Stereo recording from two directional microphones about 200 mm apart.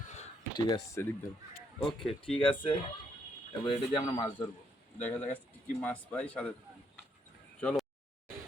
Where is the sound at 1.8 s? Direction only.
5° left (ahead or behind).